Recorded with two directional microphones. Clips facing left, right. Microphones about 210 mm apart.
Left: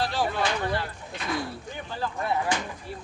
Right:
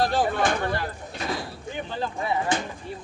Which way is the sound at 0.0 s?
50° right (ahead or behind).